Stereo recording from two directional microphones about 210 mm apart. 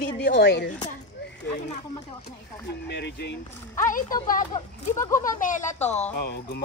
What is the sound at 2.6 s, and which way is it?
Speech, 55° left (ahead or behind).